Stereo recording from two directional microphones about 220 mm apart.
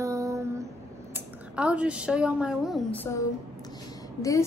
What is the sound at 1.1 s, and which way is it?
A woman's voice, 5° right (ahead or behind).